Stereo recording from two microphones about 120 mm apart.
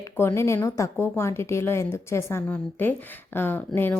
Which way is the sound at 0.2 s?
20° left (ahead or behind).